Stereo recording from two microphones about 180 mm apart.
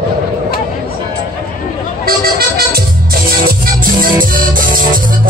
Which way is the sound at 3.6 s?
55° right (ahead or behind).